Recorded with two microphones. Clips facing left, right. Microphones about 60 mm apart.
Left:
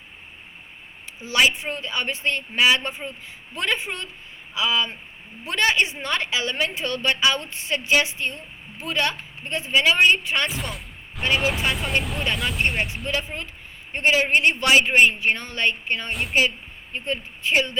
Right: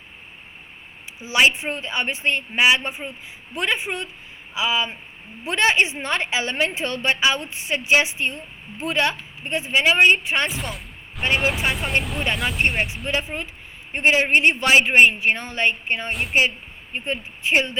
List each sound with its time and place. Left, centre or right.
1.2 s a woman's voice: centre
10.5 s a sound: centre
11.3 s speech: centre
13.1 s a woman's voice: right
16.0 s speech: centre
16.9 s a woman's voice: right